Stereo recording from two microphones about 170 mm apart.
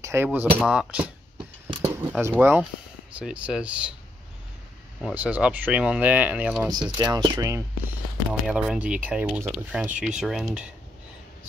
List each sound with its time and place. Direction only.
0.0 s speech: 15° right (ahead or behind)
1.8 s a sound: 15° right (ahead or behind)
3.2 s speech: 10° right (ahead or behind)
5.0 s speech: 10° right (ahead or behind)
7.0 s speech: 25° right (ahead or behind)
8.3 s speech: 5° right (ahead or behind)